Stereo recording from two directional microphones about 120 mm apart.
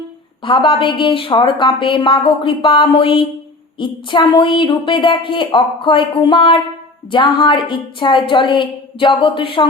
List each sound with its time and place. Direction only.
0.4 s a woman's voice: 45° left (ahead or behind)